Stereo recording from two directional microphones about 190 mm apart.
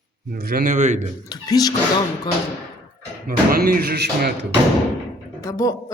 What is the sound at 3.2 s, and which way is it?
Speech, 50° right (ahead or behind).